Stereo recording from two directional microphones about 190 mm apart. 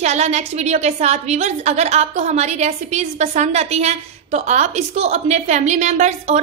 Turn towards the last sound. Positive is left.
turn(degrees=-40)  # may be behind; listen again after turning